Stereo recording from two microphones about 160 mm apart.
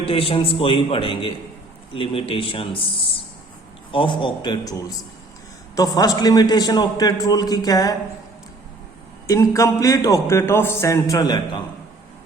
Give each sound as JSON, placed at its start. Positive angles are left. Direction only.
{"t": 0.0, "sound": "a man's voice", "side_deg": 35}
{"t": 9.2, "sound": "a man's voice", "side_deg": 20}